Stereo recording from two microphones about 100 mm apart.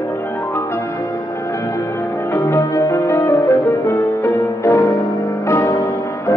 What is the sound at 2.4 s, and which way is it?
Music, 35° left (ahead or behind).